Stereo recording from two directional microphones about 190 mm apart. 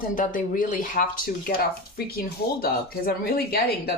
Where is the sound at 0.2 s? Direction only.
45° left (ahead or behind).